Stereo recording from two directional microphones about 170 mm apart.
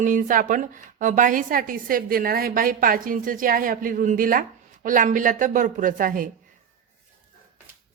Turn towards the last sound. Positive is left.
turn(degrees=-55)  # may be behind; listen again after turning